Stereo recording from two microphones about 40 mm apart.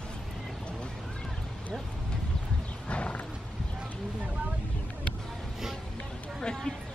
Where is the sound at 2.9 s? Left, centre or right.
Left.